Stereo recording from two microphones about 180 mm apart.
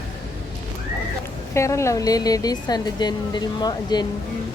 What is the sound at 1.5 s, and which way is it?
Speech, 15° left (ahead or behind).